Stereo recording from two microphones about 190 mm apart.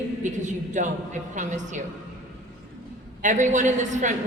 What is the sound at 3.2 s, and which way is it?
Speech, 40° right (ahead or behind).